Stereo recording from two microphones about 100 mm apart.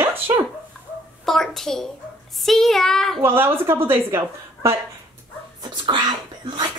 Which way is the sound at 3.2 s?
25° right (ahead or behind).